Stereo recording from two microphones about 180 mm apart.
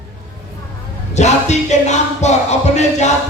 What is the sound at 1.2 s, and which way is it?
Music, 40° left (ahead or behind).